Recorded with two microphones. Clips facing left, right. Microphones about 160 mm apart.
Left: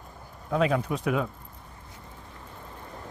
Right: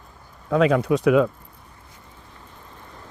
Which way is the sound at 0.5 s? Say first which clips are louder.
Right 7 dB; 90° right.